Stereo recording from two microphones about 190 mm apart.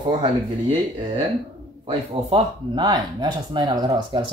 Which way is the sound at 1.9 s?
30° right (ahead or behind).